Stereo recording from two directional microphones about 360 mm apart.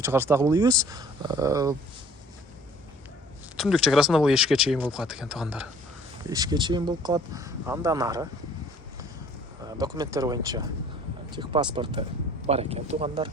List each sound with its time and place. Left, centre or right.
0.0 s speech: centre
3.6 s speech: centre
9.6 s speech: centre